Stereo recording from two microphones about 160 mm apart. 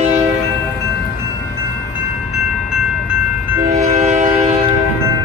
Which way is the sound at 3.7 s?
45° right (ahead or behind).